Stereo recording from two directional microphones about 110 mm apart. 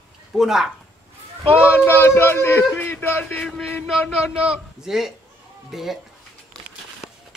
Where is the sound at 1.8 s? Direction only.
20° left (ahead or behind).